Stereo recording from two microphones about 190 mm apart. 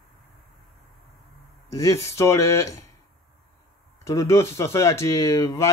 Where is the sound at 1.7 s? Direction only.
15° left (ahead or behind).